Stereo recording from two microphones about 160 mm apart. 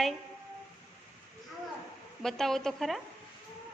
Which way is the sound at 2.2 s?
Centre (ahead or behind).